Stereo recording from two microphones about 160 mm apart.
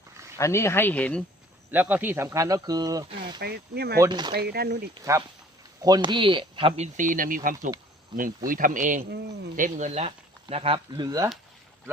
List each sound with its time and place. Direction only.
0.3 s speech: 15° left (ahead or behind)
1.7 s speech: 10° right (ahead or behind); by 3.4 s 30° right (ahead or behind)
3.4 s speech: 85° right
4.0 s speech: 25° right (ahead or behind)
4.4 s speech: 85° right
5.8 s speech: 25° right (ahead or behind); by 7.7 s 60° right (ahead or behind)
8.1 s speech: 30° right (ahead or behind)
8.4 s speech: 55° right (ahead or behind)
9.0 s speech: 90° right
9.6 s speech: 50° right (ahead or behind)
10.9 s speech: 20° right (ahead or behind)